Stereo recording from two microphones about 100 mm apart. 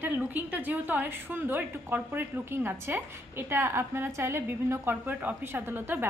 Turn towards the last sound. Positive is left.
turn(degrees=-20)  # may be behind; listen again after turning